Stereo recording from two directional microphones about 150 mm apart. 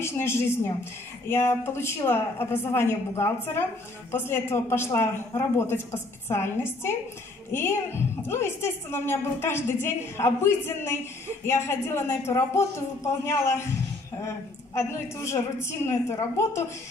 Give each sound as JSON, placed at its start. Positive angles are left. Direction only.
{"t": 0.0, "sound": "a woman's voice", "side_deg": 15}